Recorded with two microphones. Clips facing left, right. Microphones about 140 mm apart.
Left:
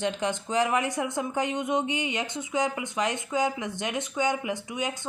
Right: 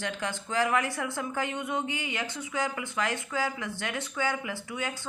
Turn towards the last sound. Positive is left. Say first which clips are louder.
# left 4 dB
turn(degrees=20)  # may be behind; listen again after turning